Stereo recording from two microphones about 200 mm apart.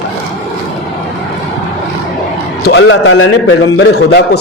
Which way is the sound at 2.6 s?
60° left (ahead or behind).